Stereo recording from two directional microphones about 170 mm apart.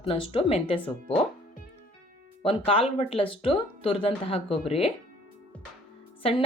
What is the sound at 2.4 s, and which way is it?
Speech, 35° left (ahead or behind).